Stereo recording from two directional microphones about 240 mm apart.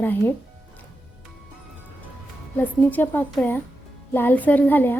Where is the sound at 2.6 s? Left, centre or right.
Centre.